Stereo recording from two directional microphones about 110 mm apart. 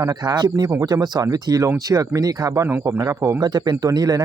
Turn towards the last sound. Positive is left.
turn(degrees=-35)  # may be behind; listen again after turning